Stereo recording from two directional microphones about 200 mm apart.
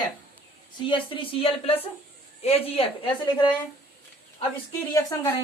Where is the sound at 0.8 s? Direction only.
25° left (ahead or behind).